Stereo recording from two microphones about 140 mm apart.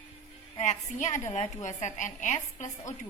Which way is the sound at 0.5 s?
60° left (ahead or behind).